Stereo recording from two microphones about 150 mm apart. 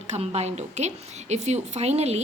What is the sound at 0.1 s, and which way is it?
A woman's voice, 45° right (ahead or behind).